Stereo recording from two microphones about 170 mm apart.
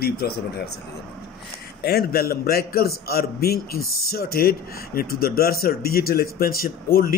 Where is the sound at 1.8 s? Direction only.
65° left (ahead or behind).